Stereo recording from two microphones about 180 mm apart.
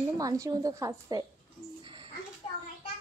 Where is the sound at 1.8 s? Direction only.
30° right (ahead or behind).